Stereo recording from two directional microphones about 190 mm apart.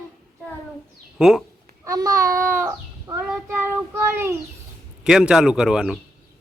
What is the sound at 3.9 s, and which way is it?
A child's voice, 15° right (ahead or behind).